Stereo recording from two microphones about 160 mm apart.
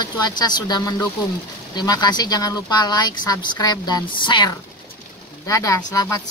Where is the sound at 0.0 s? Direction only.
25° left (ahead or behind).